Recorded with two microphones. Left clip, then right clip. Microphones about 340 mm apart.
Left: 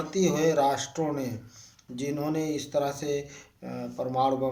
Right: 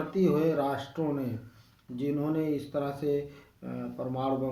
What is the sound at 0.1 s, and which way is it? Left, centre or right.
Speech, left.